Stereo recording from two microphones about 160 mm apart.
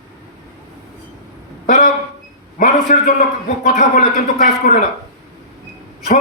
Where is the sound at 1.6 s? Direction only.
55° left (ahead or behind).